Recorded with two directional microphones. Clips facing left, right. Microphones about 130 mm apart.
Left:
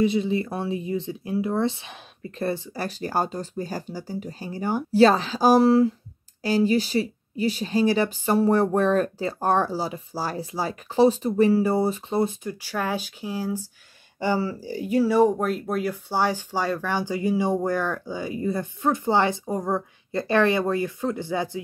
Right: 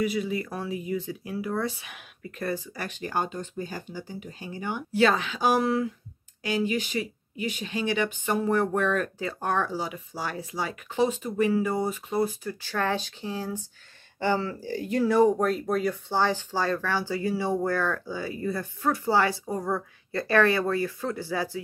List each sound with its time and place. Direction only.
0.0 s speech: 25° left (ahead or behind)
12.5 s speech: 10° left (ahead or behind)